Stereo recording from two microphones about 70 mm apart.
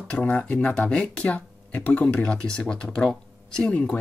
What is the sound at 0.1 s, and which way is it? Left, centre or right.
Speech, centre.